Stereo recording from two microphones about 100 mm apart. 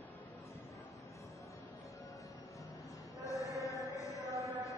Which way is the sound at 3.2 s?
35° left (ahead or behind).